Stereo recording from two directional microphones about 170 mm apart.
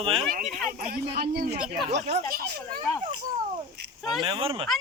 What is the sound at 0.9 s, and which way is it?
Speech, 65° right (ahead or behind).